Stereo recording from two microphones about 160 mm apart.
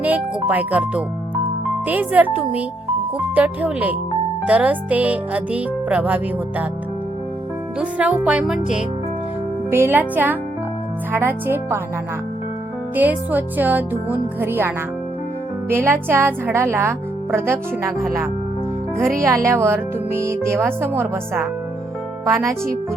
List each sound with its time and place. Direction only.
0.0 s speech: 10° right (ahead or behind)
1.5 s music: 10° right (ahead or behind)
7.8 s music: 10° right (ahead or behind)
9.6 s music: 15° right (ahead or behind)
13.0 s music: 10° right (ahead or behind)
15.7 s music: 15° right (ahead or behind)
18.9 s music: 15° right (ahead or behind)